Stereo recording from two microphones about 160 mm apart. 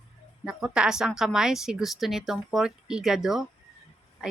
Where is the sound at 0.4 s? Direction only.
5° right (ahead or behind).